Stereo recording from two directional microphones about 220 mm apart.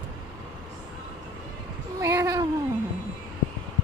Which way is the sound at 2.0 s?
15° right (ahead or behind).